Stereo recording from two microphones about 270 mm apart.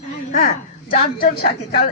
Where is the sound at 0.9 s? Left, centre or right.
Left.